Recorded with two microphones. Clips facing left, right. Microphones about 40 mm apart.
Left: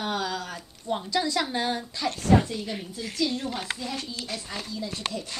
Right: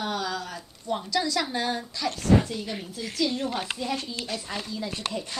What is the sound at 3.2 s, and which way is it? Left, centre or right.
Speech, centre.